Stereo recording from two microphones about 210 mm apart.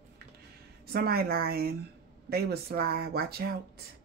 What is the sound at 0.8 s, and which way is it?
Speech, 50° right (ahead or behind).